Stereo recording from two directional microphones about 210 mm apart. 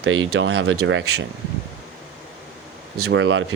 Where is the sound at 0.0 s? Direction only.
70° right (ahead or behind).